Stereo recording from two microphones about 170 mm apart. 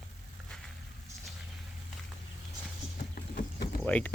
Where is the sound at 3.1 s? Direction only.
55° left (ahead or behind).